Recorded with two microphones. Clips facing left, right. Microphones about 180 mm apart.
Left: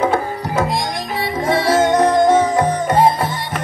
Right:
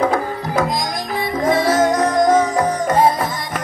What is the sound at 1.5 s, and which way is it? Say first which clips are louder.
Music: left 1 dB; 30° left (ahead or behind).